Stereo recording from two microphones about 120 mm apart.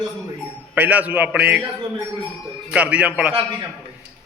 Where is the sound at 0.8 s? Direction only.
10° right (ahead or behind).